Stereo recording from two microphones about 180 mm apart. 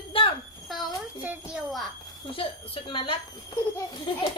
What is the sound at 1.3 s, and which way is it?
Speech, centre (ahead or behind).